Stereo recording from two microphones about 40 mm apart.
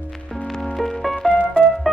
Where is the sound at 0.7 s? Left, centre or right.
Centre.